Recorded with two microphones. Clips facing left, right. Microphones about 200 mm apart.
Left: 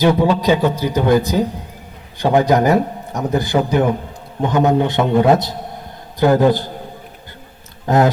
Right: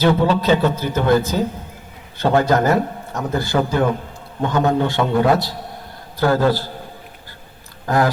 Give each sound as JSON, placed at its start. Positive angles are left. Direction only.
{"t": 0.0, "sound": "a man's voice", "side_deg": 15}
{"t": 7.9, "sound": "a man's voice", "side_deg": 20}